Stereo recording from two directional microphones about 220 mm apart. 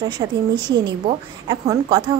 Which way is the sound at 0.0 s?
20° right (ahead or behind).